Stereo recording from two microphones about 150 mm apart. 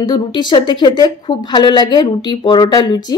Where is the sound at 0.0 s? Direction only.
30° left (ahead or behind).